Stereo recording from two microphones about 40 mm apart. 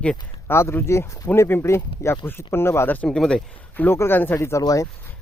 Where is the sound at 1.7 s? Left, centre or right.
Left.